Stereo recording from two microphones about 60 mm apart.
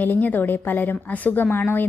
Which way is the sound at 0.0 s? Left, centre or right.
Left.